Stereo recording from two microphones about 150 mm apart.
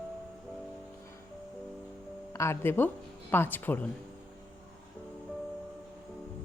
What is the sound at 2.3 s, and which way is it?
Speech, 20° left (ahead or behind).